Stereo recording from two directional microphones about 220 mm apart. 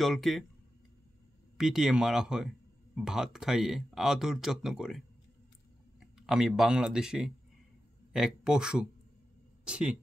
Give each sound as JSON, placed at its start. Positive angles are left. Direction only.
{"t": 0.0, "sound": "speech", "side_deg": 0}
{"t": 1.6, "sound": "speech", "side_deg": 0}